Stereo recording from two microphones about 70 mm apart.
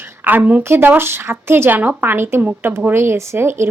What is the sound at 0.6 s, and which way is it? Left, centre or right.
A woman's voice, right.